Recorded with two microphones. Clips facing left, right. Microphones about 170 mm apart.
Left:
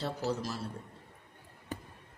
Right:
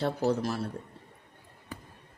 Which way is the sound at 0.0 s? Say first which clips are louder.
Right 6 dB; 55° right (ahead or behind).